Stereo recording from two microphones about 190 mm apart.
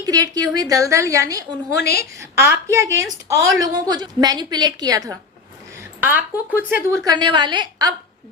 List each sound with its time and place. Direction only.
0.0 s a woman's voice: 20° right (ahead or behind)
1.7 s a woman's voice: 55° left (ahead or behind)
2.3 s a woman's voice: 15° right (ahead or behind)